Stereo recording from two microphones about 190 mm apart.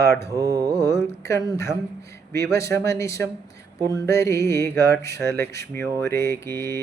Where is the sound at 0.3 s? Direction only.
15° right (ahead or behind).